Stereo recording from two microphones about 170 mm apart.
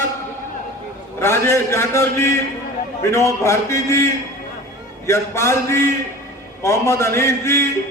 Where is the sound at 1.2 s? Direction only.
15° left (ahead or behind).